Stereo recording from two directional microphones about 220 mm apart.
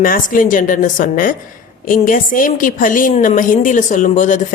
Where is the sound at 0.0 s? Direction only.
40° left (ahead or behind).